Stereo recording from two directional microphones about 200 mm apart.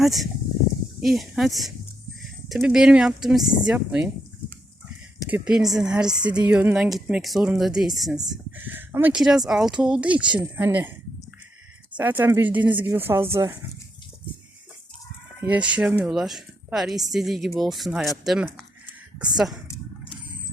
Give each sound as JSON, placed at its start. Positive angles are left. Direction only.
{"t": 0.0, "sound": "speech", "side_deg": 0}
{"t": 5.3, "sound": "speech", "side_deg": -5}
{"t": 6.1, "sound": "a woman's voice", "side_deg": -20}
{"t": 6.5, "sound": "speech", "side_deg": -5}
{"t": 11.9, "sound": "speech", "side_deg": -10}
{"t": 15.4, "sound": "speech", "side_deg": -5}